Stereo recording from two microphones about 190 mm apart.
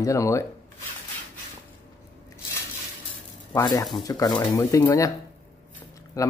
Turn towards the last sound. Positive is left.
turn(degrees=15)  # may be behind; listen again after turning